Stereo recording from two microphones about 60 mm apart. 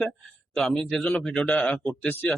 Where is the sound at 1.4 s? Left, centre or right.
Left.